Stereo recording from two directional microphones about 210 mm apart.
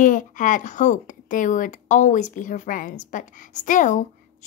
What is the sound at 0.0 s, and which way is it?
A woman's voice, 40° left (ahead or behind).